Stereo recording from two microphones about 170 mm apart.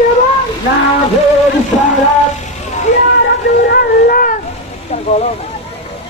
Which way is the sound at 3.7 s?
60° left (ahead or behind).